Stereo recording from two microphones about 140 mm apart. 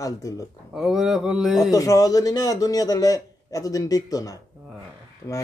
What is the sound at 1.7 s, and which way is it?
A man's voice, 25° left (ahead or behind).